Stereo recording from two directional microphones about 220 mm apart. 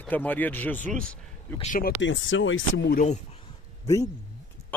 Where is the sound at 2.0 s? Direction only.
60° left (ahead or behind).